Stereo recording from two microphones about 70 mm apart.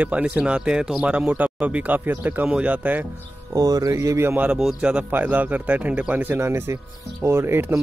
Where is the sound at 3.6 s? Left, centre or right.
Right.